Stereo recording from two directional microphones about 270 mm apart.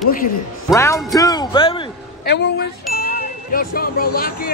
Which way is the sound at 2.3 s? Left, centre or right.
Left.